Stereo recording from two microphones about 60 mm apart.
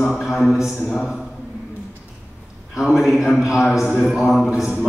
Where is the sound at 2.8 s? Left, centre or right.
Centre.